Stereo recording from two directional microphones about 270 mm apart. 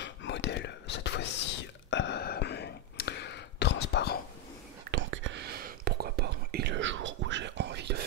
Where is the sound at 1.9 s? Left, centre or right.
Left.